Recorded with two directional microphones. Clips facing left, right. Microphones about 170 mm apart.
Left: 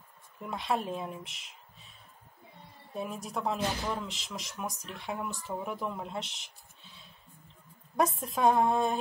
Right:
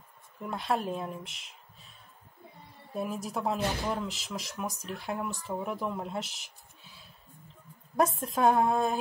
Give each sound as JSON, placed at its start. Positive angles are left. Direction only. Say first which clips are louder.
{"t": 0.4, "sound": "speech", "louder": "right 1 dB", "side_deg": 0}
{"t": 2.9, "sound": "speech", "louder": "right 3 dB", "side_deg": -5}